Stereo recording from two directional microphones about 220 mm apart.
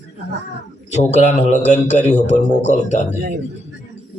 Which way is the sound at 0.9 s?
30° left (ahead or behind).